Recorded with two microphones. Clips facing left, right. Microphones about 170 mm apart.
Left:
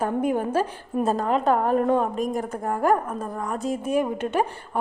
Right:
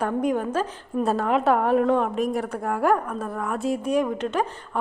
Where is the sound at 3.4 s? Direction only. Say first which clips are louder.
Right 2 dB; centre (ahead or behind).